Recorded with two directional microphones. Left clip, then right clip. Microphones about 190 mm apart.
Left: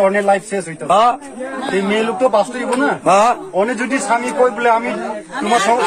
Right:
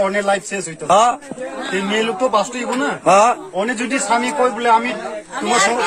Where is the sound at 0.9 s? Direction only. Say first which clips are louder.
Left 1 dB; 20° right (ahead or behind).